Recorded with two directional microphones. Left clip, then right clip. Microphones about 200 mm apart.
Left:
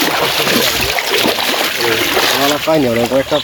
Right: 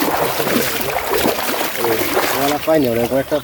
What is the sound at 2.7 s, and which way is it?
Speech, 40° left (ahead or behind).